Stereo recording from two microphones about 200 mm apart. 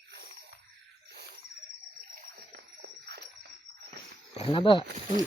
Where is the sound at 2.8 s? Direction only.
55° right (ahead or behind).